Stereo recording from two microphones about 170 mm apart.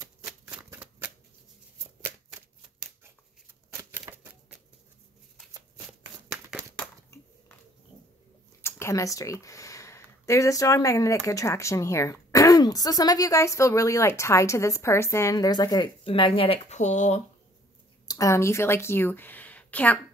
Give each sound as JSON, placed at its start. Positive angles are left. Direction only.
{"t": 0.2, "sound": "shuffling cards", "side_deg": -5}
{"t": 4.2, "sound": "a sound", "side_deg": -10}
{"t": 8.6, "sound": "speech", "side_deg": 15}
{"t": 18.0, "sound": "speech", "side_deg": 20}